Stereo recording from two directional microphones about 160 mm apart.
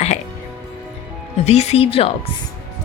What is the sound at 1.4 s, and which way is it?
Speech, 40° left (ahead or behind).